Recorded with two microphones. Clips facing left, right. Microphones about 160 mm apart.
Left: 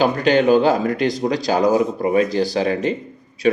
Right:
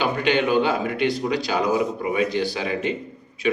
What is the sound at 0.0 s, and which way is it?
Speech, 40° left (ahead or behind).